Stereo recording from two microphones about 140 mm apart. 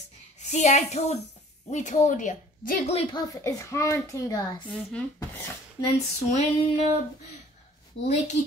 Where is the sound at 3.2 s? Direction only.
25° left (ahead or behind).